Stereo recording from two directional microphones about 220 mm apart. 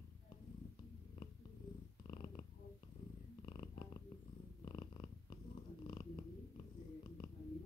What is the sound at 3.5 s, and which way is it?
Purr, 20° left (ahead or behind).